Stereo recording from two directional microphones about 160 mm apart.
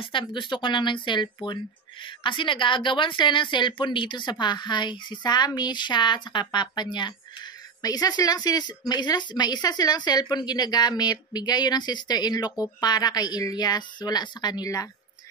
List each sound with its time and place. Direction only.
0.0 s speech: 30° left (ahead or behind)